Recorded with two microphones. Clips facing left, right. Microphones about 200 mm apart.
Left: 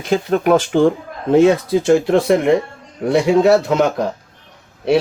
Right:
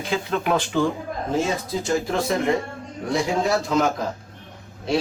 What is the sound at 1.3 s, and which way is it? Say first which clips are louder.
A man's voice: left 13 dB; 65° left (ahead or behind).